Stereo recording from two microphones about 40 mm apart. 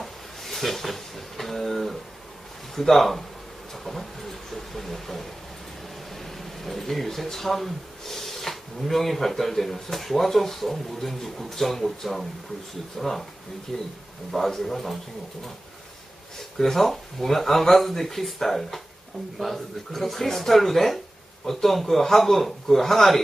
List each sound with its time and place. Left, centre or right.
0.0 s a sound: centre
2.7 s speech: centre
13.0 s speech: centre
16.3 s speech: centre